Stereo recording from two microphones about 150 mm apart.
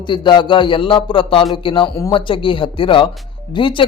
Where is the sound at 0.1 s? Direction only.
30° left (ahead or behind).